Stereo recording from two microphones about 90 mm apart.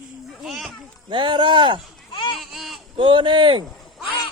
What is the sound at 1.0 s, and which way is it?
Speech, 65° right (ahead or behind).